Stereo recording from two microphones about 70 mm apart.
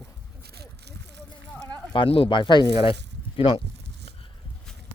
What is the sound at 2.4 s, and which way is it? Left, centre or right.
Speech, left.